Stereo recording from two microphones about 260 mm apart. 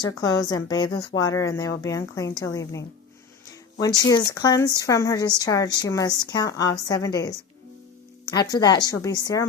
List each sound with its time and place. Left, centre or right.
0.2 s a woman's voice: centre
8.2 s music: centre
8.5 s a woman's voice: centre